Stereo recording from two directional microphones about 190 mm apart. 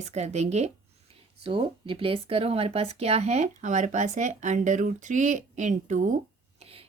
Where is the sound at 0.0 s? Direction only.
35° right (ahead or behind).